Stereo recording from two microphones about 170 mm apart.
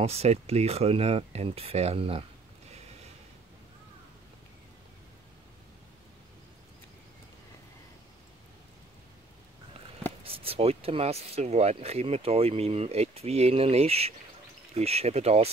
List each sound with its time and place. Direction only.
0.0 s speech: 35° right (ahead or behind)
10.2 s speech: 35° right (ahead or behind)